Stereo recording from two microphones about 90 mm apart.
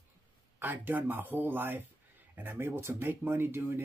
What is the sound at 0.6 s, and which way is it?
Speech, 20° right (ahead or behind).